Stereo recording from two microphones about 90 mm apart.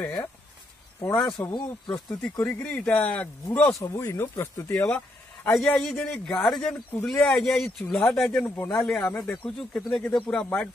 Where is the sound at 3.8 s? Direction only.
35° left (ahead or behind).